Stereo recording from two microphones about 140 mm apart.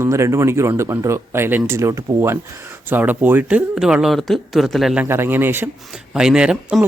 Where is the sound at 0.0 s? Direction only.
20° right (ahead or behind); by 5.0 s centre (ahead or behind).